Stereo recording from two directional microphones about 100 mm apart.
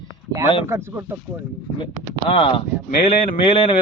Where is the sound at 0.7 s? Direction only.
25° right (ahead or behind).